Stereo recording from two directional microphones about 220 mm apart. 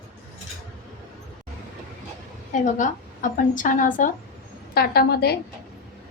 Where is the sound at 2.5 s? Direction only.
35° left (ahead or behind).